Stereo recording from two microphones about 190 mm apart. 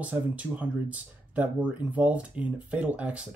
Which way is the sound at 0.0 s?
5° right (ahead or behind).